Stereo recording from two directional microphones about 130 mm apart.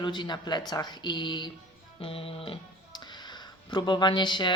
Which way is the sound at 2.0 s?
45° left (ahead or behind).